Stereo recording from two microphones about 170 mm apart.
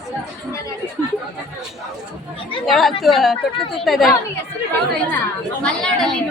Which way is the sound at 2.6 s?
Centre (ahead or behind).